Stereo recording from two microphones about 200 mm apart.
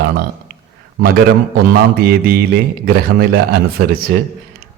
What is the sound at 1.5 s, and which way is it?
A man's voice, 50° right (ahead or behind).